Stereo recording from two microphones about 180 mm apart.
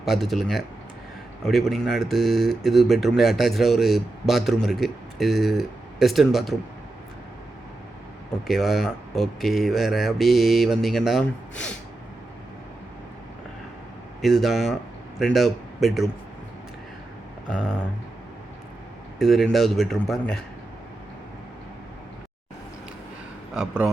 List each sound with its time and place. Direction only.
0.0 s speech: centre (ahead or behind)
8.4 s speech: centre (ahead or behind)
14.2 s speech: centre (ahead or behind)
19.2 s speech: centre (ahead or behind)
23.6 s speech: 5° right (ahead or behind)